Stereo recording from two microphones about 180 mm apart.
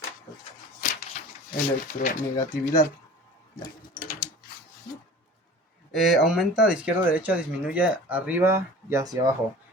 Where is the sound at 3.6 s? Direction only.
50° left (ahead or behind).